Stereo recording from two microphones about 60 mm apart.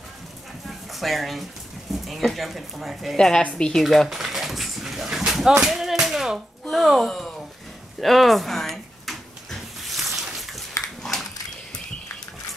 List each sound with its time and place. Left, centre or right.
0.7 s a sound: centre
1.9 s speech: centre
3.2 s a woman's voice: centre
3.8 s dog: centre
5.7 s speech: centre
8.0 s a sound: centre